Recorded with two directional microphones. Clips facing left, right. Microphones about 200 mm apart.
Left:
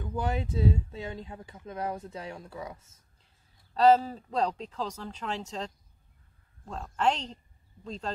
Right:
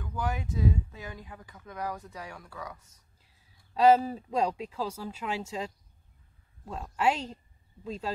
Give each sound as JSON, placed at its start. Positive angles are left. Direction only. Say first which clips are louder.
{"t": 0.0, "sound": "speech", "louder": "left 2 dB", "side_deg": 25}
{"t": 3.7, "sound": "speech", "louder": "even", "side_deg": -10}